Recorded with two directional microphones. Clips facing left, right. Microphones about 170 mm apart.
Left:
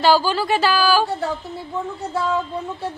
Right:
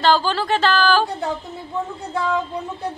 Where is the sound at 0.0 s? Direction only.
5° left (ahead or behind).